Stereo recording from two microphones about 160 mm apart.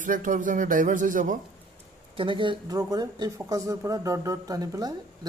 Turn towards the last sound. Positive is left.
turn(degrees=-25)  # may be behind; listen again after turning